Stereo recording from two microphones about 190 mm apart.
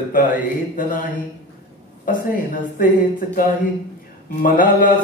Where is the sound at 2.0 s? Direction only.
50° left (ahead or behind).